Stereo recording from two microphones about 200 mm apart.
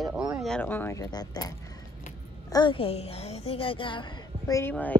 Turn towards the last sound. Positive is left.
turn(degrees=10)  # may be behind; listen again after turning